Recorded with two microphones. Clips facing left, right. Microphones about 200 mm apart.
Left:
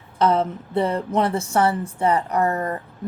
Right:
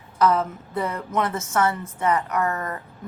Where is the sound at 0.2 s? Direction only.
30° left (ahead or behind).